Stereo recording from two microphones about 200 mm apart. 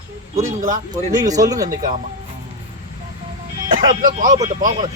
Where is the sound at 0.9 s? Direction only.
20° right (ahead or behind).